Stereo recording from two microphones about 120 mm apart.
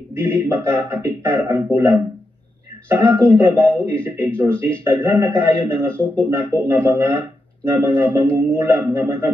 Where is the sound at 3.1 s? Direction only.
20° right (ahead or behind).